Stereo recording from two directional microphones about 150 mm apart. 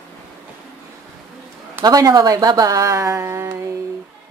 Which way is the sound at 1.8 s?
25° right (ahead or behind).